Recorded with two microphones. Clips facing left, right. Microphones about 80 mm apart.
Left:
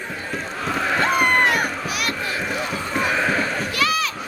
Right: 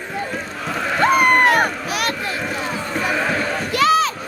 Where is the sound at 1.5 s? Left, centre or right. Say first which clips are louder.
Right 5 dB; right.